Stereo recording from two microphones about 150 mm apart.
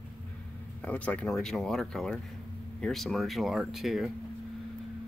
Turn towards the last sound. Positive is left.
turn(degrees=0)  # may be behind; listen again after turning